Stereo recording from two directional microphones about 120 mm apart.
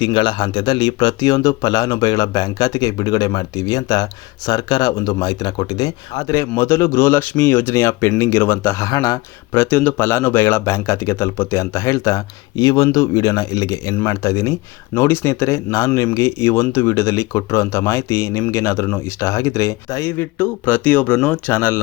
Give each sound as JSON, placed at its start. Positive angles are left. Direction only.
{"t": 0.0, "sound": "speech", "side_deg": 40}